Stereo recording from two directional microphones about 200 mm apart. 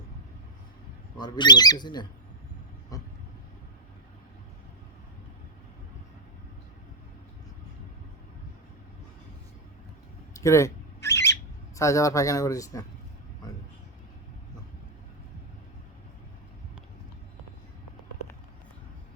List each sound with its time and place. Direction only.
1.1 s speech: 20° left (ahead or behind)
10.3 s a sound: 15° left (ahead or behind)
11.8 s speech: 15° left (ahead or behind)